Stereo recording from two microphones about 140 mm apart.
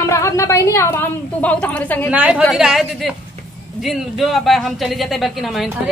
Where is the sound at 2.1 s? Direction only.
10° right (ahead or behind).